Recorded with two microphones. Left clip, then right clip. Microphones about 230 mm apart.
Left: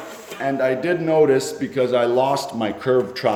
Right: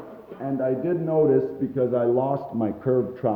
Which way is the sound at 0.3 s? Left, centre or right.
Centre.